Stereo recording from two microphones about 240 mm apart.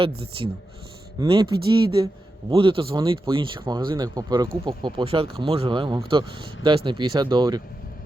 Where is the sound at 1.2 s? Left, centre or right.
Centre.